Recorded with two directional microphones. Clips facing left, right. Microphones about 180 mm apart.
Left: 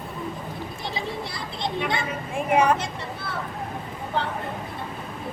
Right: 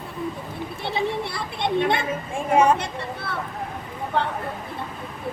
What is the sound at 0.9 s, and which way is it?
Children playing, 60° right (ahead or behind).